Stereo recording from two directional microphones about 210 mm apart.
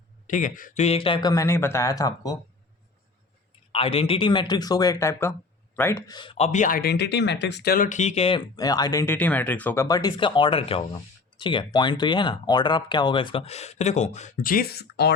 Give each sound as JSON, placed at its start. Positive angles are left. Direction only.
{"t": 0.3, "sound": "speech", "side_deg": 40}
{"t": 3.7, "sound": "speech", "side_deg": 25}
{"t": 8.5, "sound": "speech", "side_deg": 20}